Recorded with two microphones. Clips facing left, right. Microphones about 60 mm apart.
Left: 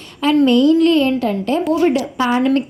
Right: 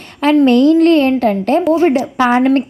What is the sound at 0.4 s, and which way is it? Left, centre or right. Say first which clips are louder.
A woman's voice: right 3 dB; right.